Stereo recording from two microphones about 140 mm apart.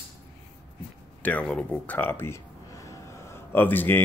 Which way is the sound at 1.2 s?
10° left (ahead or behind).